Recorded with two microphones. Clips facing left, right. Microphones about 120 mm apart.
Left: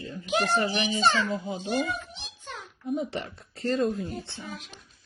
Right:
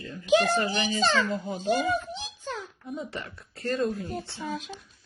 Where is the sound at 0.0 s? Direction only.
30° left (ahead or behind).